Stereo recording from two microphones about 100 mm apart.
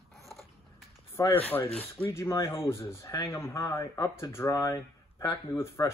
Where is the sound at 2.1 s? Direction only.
30° left (ahead or behind).